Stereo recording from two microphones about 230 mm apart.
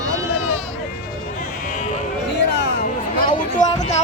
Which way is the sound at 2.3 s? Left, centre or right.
Left.